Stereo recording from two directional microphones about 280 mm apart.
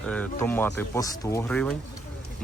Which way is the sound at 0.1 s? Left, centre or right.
Centre.